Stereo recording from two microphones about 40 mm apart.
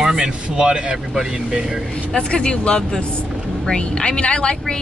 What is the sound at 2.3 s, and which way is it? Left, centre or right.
Speech, left.